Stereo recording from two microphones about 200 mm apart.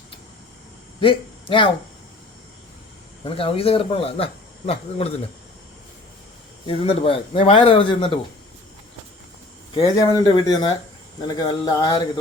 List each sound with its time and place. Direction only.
0.9 s speech: 25° left (ahead or behind)
3.2 s speech: 25° left (ahead or behind)
6.7 s speech: 30° left (ahead or behind)
9.7 s speech: 20° left (ahead or behind)